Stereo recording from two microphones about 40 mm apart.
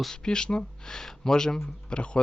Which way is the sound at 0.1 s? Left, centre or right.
Centre.